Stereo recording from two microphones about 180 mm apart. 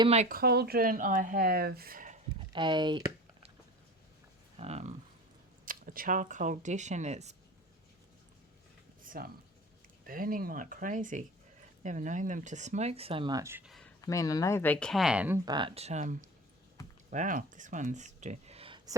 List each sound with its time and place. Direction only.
0.0 s speech: 35° right (ahead or behind)
0.3 s speech: 60° right (ahead or behind)
2.5 s a sound: 25° right (ahead or behind)
4.5 s speech: 35° right (ahead or behind)
5.6 s speech: 50° right (ahead or behind)
9.2 s speech: 55° right (ahead or behind); by 13.7 s 15° right (ahead or behind)
13.7 s a sound: centre (ahead or behind)
14.0 s speech: 20° left (ahead or behind); by 15.4 s 5° right (ahead or behind)
15.4 s speech: 25° right (ahead or behind)